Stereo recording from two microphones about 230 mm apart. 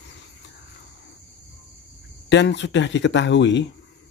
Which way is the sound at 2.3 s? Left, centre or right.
Left.